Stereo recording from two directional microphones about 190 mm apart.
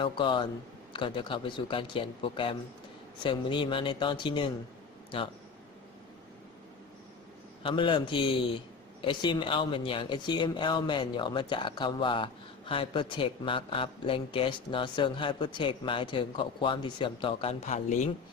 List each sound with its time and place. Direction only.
0.0 s a man's voice: 25° left (ahead or behind)
7.6 s a man's voice: 25° left (ahead or behind)